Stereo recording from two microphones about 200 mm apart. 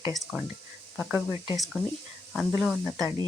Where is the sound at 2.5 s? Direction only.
5° right (ahead or behind).